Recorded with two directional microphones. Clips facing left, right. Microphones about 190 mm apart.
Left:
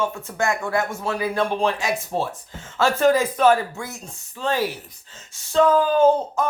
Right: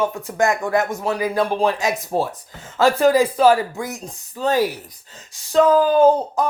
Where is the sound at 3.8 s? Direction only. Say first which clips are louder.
Right 5 dB; 15° right (ahead or behind).